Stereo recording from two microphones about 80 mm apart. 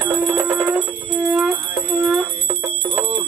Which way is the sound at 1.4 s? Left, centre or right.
Centre.